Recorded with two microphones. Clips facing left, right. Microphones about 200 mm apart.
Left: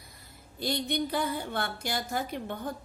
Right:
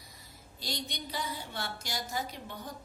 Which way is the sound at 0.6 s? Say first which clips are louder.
Left 10 dB; 55° left (ahead or behind).